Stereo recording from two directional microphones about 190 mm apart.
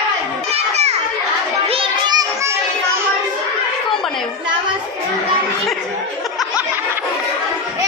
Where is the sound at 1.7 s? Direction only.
25° right (ahead or behind).